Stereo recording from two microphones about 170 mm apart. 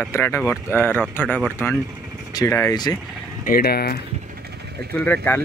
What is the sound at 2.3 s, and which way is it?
Speech, 15° left (ahead or behind).